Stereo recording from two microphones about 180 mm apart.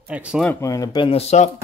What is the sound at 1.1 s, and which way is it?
Speech, 35° left (ahead or behind).